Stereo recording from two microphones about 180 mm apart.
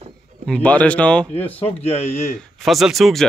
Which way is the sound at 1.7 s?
35° left (ahead or behind).